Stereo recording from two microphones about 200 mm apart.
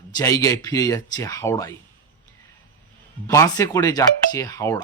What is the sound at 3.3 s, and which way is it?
Speech, 15° left (ahead or behind).